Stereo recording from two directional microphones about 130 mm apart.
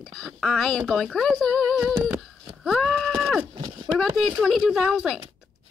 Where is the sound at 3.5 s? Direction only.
40° right (ahead or behind).